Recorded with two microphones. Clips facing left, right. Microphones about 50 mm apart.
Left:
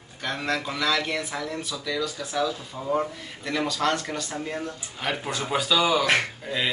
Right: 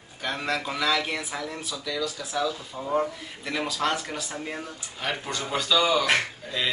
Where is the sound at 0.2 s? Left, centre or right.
Centre.